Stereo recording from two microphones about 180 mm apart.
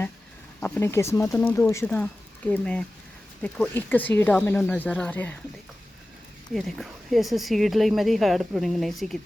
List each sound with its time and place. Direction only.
0.6 s speech: 10° left (ahead or behind)
6.5 s speech: centre (ahead or behind)